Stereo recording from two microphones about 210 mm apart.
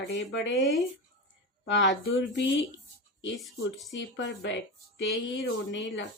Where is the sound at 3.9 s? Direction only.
55° left (ahead or behind).